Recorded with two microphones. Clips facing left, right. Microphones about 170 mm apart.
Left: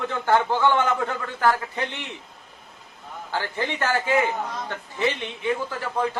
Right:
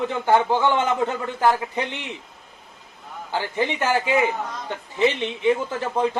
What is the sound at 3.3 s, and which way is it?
A man's voice, 15° right (ahead or behind).